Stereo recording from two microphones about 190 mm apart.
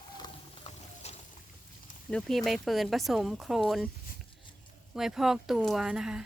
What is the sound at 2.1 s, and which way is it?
Speech, 5° left (ahead or behind).